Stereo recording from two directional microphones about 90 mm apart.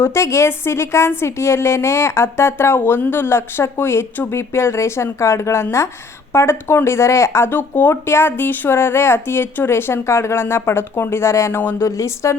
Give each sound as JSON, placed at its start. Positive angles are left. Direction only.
{"t": 0.0, "sound": "speech", "side_deg": 30}